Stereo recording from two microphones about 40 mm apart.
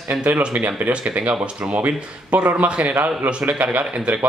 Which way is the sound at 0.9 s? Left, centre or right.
Right.